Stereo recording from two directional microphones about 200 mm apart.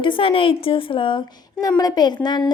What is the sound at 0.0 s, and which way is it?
A woman's voice, 25° left (ahead or behind).